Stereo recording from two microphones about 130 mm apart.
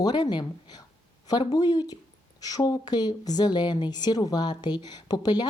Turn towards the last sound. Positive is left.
turn(degrees=30)  # may be behind; listen again after turning